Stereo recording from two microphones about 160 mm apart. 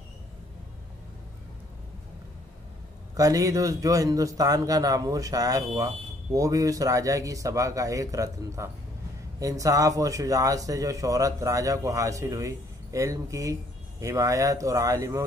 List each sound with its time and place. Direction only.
3.2 s speech: 20° right (ahead or behind)